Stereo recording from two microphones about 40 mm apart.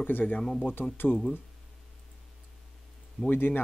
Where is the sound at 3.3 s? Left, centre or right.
Left.